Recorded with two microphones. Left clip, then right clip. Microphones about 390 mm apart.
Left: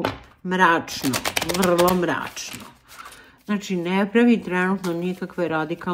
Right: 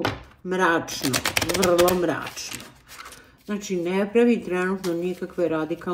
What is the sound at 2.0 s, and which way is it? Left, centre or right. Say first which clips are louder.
Speech: left 1 dB; left.